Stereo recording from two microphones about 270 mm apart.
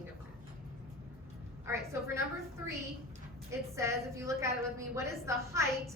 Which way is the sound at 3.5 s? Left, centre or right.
Centre.